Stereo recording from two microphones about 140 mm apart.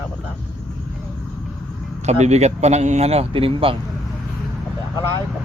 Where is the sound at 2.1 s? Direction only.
50° right (ahead or behind).